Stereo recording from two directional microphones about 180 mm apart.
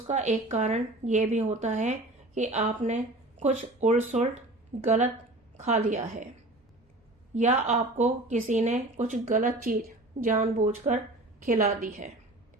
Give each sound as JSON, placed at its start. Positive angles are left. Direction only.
{"t": 0.1, "sound": "a woman's voice", "side_deg": -40}
{"t": 7.3, "sound": "a woman's voice", "side_deg": -40}